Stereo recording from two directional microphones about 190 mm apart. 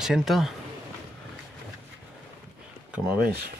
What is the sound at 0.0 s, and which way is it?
Speech, centre (ahead or behind).